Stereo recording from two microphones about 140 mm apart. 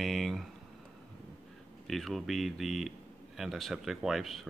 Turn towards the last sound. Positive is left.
turn(degrees=0)  # may be behind; listen again after turning